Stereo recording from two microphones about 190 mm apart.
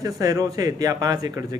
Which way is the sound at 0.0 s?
20° right (ahead or behind).